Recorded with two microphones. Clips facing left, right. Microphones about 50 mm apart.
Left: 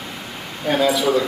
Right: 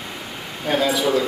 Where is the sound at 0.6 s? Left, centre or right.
Centre.